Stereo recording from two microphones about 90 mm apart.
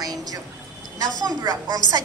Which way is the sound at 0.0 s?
45° right (ahead or behind).